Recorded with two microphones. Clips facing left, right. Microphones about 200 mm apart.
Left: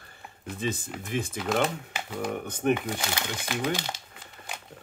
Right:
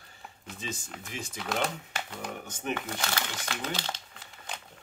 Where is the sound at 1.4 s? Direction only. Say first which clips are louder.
Left 3 dB; 5° left (ahead or behind).